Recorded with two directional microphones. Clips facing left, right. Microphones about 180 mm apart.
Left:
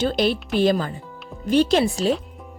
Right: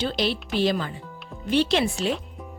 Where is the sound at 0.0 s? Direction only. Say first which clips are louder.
Left 5 dB; 45° left (ahead or behind).